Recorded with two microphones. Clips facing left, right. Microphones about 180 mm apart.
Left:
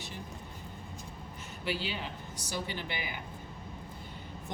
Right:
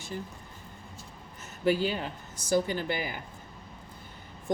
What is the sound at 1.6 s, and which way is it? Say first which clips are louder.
A woman's voice: right 9 dB; 45° right (ahead or behind).